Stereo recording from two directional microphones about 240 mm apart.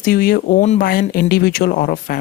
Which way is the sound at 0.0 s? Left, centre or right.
Left.